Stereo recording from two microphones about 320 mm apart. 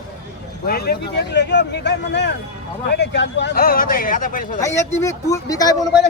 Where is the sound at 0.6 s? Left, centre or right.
Left.